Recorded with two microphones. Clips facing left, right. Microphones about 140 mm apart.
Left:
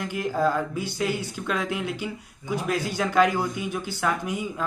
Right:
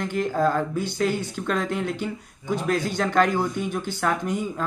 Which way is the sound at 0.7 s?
50° right (ahead or behind).